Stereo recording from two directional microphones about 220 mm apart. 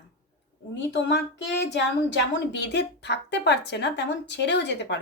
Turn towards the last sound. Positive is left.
turn(degrees=55)  # may be behind; listen again after turning